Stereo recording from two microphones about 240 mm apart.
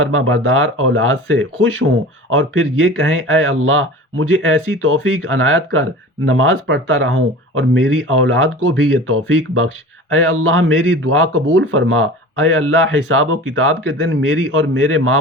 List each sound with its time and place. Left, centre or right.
0.0 s a man's voice: right